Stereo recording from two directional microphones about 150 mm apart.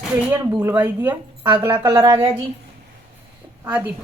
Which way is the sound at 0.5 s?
10° right (ahead or behind).